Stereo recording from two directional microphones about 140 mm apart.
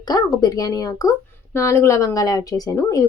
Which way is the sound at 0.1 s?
25° left (ahead or behind).